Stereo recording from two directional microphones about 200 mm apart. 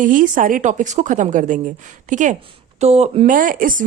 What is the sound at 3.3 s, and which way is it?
Speech, 45° right (ahead or behind).